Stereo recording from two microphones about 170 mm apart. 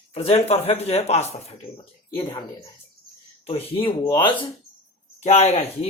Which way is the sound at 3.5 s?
35° left (ahead or behind).